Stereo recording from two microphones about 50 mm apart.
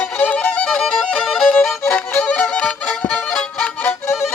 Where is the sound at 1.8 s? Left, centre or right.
Left.